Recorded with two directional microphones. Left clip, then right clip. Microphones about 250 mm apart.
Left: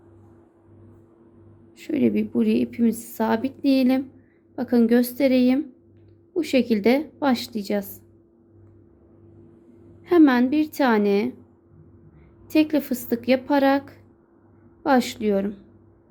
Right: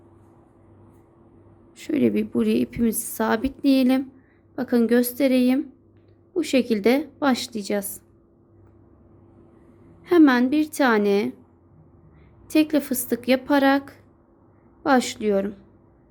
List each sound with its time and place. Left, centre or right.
1.7 s a woman's voice: centre
10.0 s a woman's voice: centre
12.5 s a woman's voice: centre